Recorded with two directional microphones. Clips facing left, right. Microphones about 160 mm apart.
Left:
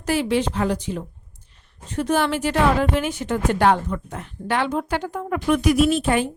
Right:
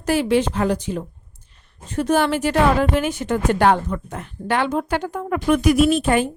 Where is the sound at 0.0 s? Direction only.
45° right (ahead or behind).